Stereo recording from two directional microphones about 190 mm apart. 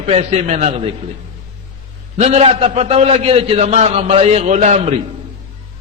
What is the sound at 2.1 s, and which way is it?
A man's voice, 35° right (ahead or behind).